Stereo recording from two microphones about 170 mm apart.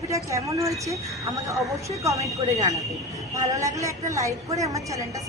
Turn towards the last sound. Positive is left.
turn(degrees=-20)  # may be behind; listen again after turning